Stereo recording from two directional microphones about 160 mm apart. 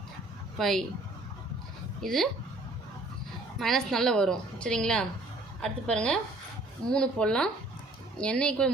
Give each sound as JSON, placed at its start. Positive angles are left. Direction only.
{"t": 0.6, "sound": "a woman's voice", "side_deg": 0}
{"t": 2.0, "sound": "a woman's voice", "side_deg": 0}
{"t": 3.6, "sound": "a woman's voice", "side_deg": 0}